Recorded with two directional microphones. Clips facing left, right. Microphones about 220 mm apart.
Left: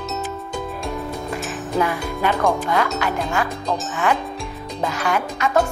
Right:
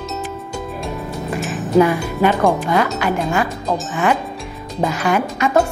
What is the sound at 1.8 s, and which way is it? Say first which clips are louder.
Speech: right 8 dB; 15° right (ahead or behind).